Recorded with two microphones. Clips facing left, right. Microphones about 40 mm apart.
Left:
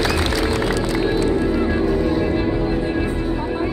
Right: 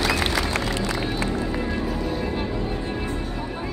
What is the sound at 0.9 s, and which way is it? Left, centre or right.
Music, centre.